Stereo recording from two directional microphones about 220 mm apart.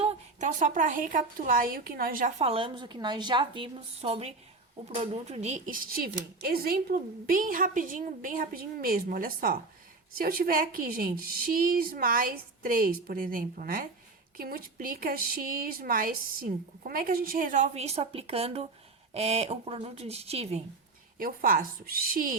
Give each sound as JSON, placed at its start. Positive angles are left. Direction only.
{"t": 0.0, "sound": "a woman's voice", "side_deg": -30}
{"t": 2.4, "sound": "a woman's voice", "side_deg": -25}
{"t": 21.2, "sound": "a woman's voice", "side_deg": -40}